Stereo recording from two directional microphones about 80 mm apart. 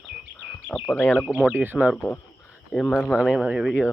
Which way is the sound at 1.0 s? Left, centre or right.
Left.